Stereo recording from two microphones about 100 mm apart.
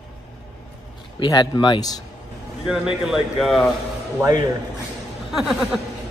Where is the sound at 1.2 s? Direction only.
50° left (ahead or behind).